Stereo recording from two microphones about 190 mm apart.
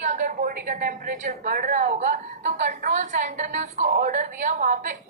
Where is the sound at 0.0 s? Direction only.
40° right (ahead or behind).